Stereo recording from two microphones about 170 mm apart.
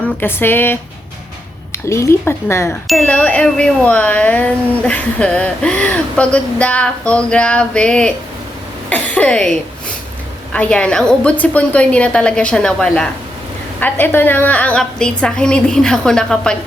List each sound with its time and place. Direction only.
0.2 s speech: 15° left (ahead or behind)
1.9 s speech: 15° left (ahead or behind)
2.8 s speech: 5° left (ahead or behind)
10.5 s a woman's voice: 5° left (ahead or behind)